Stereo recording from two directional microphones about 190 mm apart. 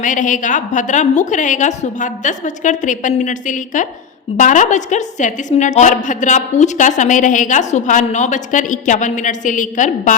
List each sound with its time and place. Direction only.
0.0 s a woman's voice: 40° left (ahead or behind)